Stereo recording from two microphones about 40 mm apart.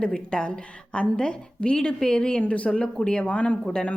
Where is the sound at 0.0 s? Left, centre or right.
Left.